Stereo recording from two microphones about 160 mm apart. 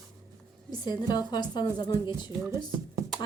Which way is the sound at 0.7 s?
25° left (ahead or behind).